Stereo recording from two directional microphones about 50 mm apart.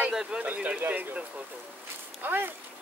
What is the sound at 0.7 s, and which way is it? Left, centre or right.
Speech, right.